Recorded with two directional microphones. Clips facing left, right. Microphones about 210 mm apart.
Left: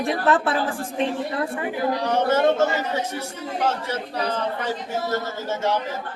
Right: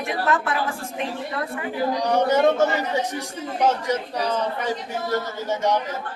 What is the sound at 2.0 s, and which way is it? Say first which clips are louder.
Speech: right 1 dB; 15° right (ahead or behind).